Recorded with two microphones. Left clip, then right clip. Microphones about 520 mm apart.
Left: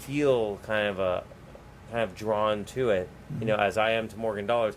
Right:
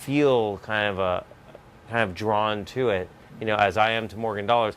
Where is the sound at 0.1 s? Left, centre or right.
Right.